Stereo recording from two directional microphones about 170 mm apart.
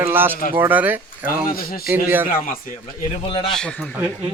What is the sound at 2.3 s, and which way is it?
Speech, 55° left (ahead or behind).